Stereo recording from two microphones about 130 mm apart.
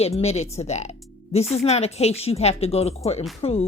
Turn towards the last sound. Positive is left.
turn(degrees=55)  # may be behind; listen again after turning